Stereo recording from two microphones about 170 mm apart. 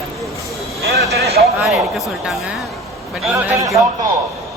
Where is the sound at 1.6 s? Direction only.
Centre (ahead or behind).